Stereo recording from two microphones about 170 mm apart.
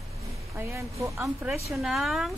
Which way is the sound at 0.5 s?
15° right (ahead or behind).